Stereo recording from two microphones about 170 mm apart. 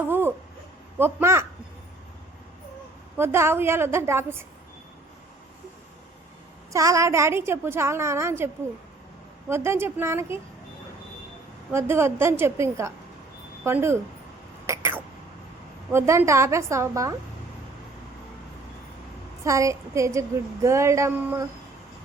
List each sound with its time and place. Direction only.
0.0 s a sound: 10° right (ahead or behind)
0.9 s a woman's voice: 15° right (ahead or behind)
3.2 s a woman's voice: 15° right (ahead or behind)
6.7 s a woman's voice: 20° right (ahead or behind)
9.5 s a woman's voice: 15° right (ahead or behind)
11.7 s a woman's voice: 15° right (ahead or behind)
14.7 s throat clearing: 15° right (ahead or behind)
15.9 s a woman's voice: 15° right (ahead or behind)
19.5 s a woman's voice: 20° right (ahead or behind)